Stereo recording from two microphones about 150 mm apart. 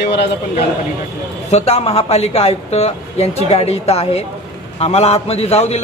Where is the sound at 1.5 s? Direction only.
45° left (ahead or behind).